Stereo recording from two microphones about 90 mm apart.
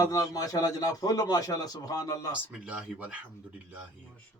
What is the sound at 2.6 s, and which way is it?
Speech, 15° right (ahead or behind).